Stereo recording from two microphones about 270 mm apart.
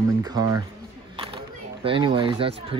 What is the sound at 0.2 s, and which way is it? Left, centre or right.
Speech, centre.